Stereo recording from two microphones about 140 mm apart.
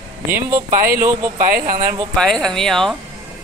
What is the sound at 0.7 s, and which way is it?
Speech, 90° right.